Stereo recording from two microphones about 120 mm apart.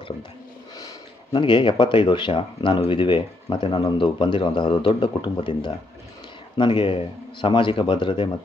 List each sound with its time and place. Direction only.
1.3 s speech: 45° left (ahead or behind)